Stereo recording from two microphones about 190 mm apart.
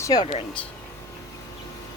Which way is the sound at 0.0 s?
20° left (ahead or behind).